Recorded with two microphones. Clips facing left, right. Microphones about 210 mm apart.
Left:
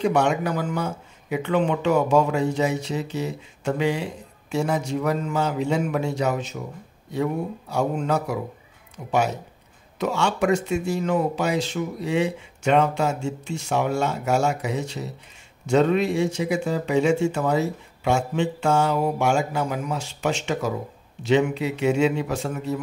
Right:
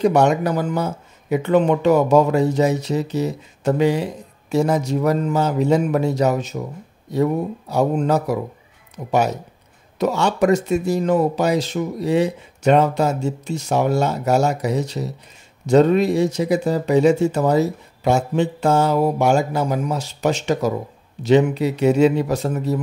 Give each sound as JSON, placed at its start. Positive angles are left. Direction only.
{"t": 0.0, "sound": "speech", "side_deg": -40}
{"t": 7.7, "sound": "speech", "side_deg": -40}